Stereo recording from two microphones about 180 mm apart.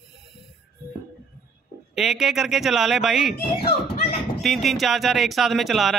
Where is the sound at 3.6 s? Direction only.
60° left (ahead or behind).